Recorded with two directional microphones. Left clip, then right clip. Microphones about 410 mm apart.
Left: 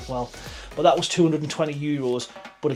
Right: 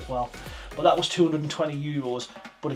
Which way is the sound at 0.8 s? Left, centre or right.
Left.